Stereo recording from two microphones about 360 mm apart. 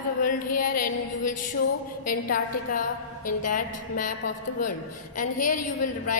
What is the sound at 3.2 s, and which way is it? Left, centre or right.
Speech, left.